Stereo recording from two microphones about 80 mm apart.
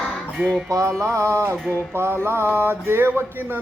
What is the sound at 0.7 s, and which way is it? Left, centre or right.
Music, right.